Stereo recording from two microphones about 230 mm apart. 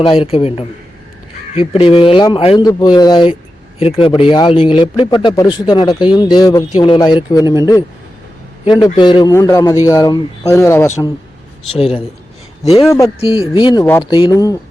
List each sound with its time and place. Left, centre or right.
0.1 s speech: left
8.6 s speech: centre
11.8 s speech: left